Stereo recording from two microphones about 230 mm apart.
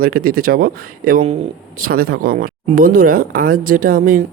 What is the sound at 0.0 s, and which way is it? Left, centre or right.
Speech, right.